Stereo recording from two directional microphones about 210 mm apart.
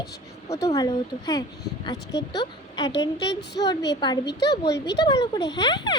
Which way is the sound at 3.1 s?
55° left (ahead or behind).